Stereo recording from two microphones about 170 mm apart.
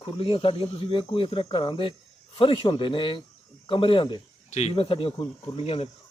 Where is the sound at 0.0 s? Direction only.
30° left (ahead or behind).